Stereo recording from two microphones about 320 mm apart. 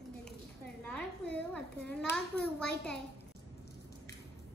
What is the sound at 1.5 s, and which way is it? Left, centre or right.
A child's voice, centre.